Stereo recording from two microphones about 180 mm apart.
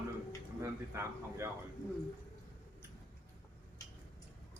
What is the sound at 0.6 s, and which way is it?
Speech, 15° right (ahead or behind).